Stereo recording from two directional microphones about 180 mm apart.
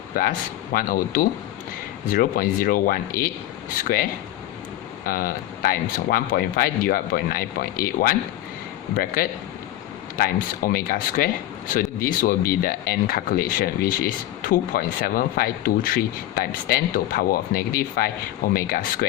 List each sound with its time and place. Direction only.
0.2 s speech: 55° left (ahead or behind)
5.0 s speech: 55° left (ahead or behind)
9.2 s speech: 55° left (ahead or behind)